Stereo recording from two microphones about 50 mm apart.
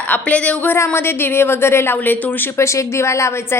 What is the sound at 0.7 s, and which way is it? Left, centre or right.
A woman's voice, left.